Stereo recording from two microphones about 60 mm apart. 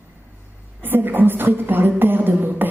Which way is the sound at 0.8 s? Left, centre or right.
Right.